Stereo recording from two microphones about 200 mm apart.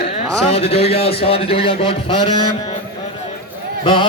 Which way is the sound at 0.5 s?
30° left (ahead or behind).